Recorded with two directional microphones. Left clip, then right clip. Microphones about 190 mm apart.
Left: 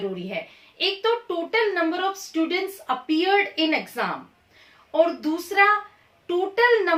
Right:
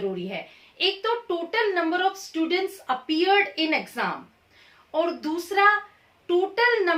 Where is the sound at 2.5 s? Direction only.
20° right (ahead or behind).